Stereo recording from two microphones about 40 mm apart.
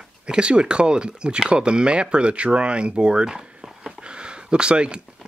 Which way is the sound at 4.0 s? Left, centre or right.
Right.